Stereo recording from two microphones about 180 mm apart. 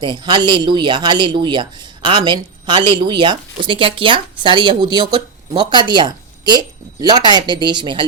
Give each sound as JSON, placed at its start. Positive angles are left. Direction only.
{"t": 0.0, "sound": "speech", "side_deg": -25}